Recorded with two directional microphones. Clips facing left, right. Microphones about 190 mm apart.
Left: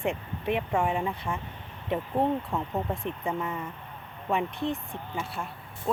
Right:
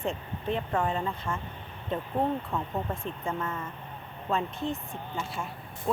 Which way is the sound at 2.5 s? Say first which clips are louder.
Left 2 dB; 15° left (ahead or behind).